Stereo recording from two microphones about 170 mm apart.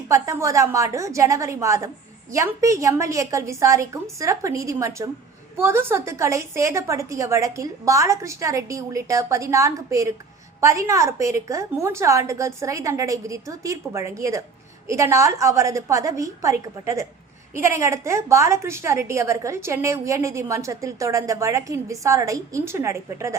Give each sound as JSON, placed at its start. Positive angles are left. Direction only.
{"t": 0.1, "sound": "a woman's voice", "side_deg": -20}